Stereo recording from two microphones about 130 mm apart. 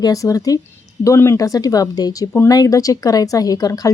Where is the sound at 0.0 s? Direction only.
25° left (ahead or behind).